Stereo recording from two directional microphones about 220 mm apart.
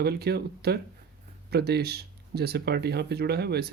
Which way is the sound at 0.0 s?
45° right (ahead or behind).